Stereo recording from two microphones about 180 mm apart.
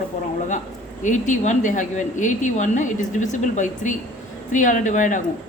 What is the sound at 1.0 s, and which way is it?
A woman's voice, 45° left (ahead or behind).